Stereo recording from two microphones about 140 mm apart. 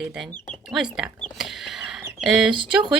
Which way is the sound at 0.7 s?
5° right (ahead or behind).